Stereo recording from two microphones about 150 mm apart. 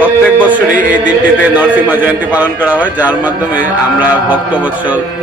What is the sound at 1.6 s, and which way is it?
A man's voice, 10° right (ahead or behind).